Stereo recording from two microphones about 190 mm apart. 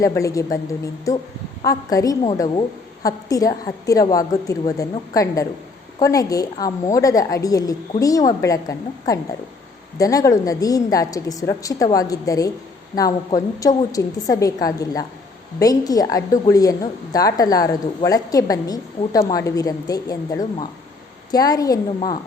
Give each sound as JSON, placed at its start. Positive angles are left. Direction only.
{"t": 0.0, "sound": "a woman's voice", "side_deg": 15}